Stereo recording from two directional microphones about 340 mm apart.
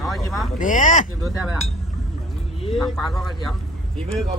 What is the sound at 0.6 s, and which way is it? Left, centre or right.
Speech, left.